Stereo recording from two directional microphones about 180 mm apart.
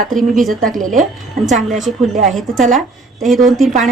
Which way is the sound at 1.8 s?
Centre (ahead or behind).